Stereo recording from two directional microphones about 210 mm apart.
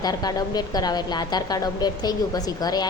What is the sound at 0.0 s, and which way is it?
A woman's voice, 20° left (ahead or behind).